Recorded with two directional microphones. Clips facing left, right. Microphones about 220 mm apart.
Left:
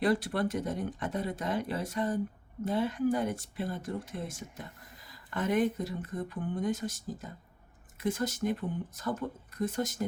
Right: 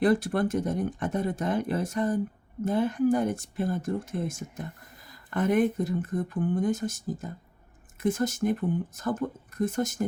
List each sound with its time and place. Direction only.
0.0 s speech: 50° right (ahead or behind)